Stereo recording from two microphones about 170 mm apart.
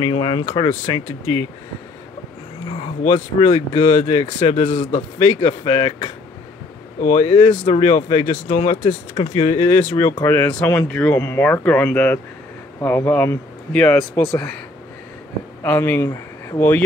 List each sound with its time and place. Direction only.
0.0 s speech: 30° left (ahead or behind)
3.3 s speech: 35° left (ahead or behind)
7.3 s speech: 30° left (ahead or behind)
9.7 s speech: 10° left (ahead or behind)
15.6 s speech: 10° left (ahead or behind)